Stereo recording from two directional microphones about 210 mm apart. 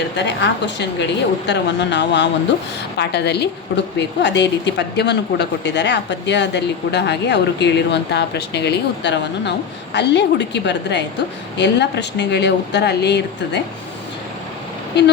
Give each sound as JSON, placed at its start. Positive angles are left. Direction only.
{"t": 0.2, "sound": "a woman's voice", "side_deg": 55}